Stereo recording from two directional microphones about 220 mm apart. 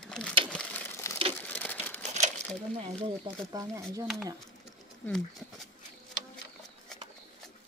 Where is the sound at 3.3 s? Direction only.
25° right (ahead or behind).